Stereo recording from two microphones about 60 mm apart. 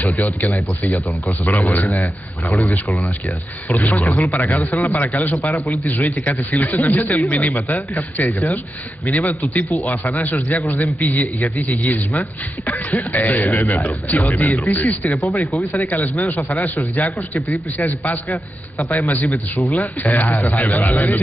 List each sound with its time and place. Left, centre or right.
0.0 s a man's voice: left
1.6 s a man's voice: left